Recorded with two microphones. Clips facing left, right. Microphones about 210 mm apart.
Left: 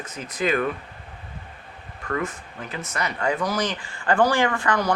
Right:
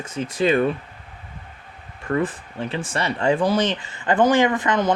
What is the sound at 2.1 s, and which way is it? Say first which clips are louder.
Speech: right 5 dB; 30° right (ahead or behind).